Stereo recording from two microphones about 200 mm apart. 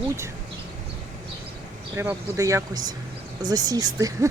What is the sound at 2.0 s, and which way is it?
Speech, 15° right (ahead or behind).